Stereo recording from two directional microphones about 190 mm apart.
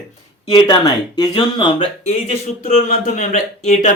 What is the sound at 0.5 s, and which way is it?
Speech, 20° left (ahead or behind).